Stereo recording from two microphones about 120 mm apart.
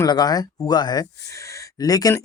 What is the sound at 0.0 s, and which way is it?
A man's voice, 35° left (ahead or behind).